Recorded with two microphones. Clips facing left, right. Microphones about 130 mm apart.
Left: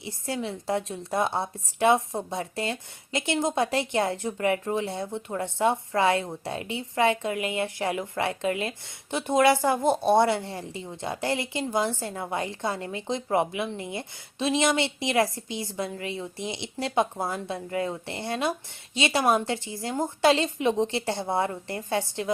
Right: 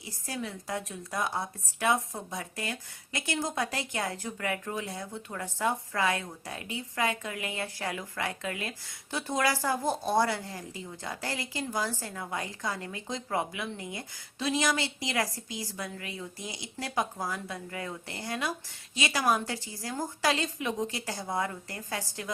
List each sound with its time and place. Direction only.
0.0 s a woman's voice: 25° left (ahead or behind)